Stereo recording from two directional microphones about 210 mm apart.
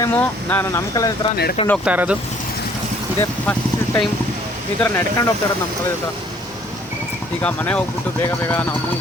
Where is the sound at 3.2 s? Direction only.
10° left (ahead or behind).